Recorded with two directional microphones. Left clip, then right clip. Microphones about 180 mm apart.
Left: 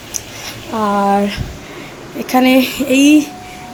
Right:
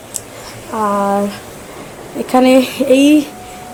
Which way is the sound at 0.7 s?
20° left (ahead or behind).